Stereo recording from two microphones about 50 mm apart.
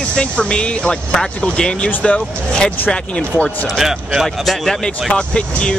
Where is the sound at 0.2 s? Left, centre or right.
Centre.